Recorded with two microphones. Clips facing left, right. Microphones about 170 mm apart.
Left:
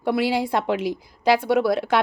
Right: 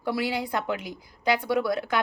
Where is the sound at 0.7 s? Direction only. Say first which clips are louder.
Left 8 dB; 85° left.